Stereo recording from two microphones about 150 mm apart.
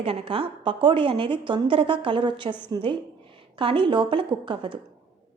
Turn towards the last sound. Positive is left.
turn(degrees=-35)  # may be behind; listen again after turning